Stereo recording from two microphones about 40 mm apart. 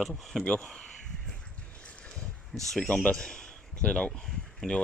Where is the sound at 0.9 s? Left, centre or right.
Centre.